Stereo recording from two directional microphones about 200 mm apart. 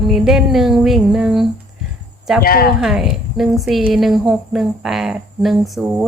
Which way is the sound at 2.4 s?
50° left (ahead or behind).